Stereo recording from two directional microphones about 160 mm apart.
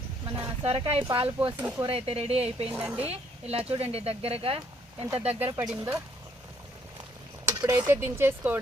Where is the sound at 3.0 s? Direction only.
40° right (ahead or behind).